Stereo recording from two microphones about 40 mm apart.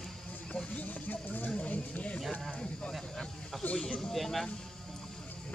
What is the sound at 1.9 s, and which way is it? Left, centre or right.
Speech, left.